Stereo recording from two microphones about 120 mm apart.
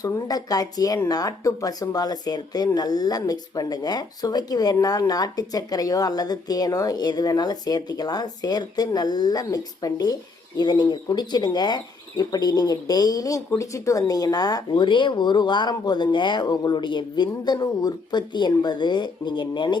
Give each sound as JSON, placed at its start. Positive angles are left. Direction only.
{"t": 0.0, "sound": "speech", "side_deg": 30}